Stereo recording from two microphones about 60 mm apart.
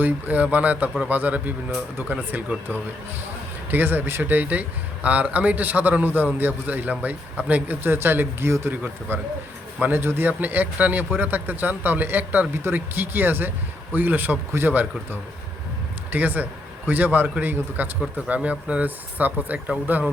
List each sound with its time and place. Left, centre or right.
0.0 s a man's voice: right
3.7 s a man's voice: right
7.9 s a man's voice: right
8.7 s a man's voice: right